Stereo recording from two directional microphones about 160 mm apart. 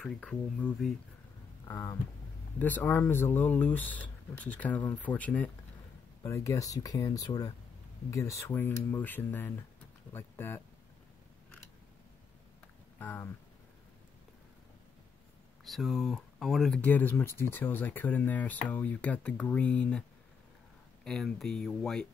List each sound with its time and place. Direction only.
0.0 s speech: 5° left (ahead or behind)
1.7 s speech: 20° left (ahead or behind)
6.2 s speech: 20° left (ahead or behind)
13.0 s speech: 10° left (ahead or behind)
15.6 s speech: centre (ahead or behind)
21.0 s speech: 5° left (ahead or behind)